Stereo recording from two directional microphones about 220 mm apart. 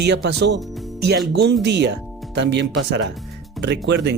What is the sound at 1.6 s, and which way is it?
Speech, 50° right (ahead or behind).